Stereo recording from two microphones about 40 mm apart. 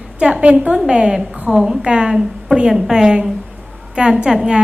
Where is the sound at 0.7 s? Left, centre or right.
Centre.